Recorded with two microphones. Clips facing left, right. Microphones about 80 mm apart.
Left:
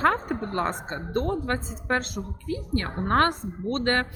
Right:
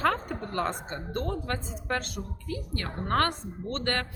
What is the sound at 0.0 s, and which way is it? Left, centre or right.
A woman's voice, left.